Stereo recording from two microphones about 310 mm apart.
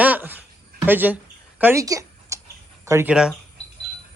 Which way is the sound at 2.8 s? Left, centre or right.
Centre.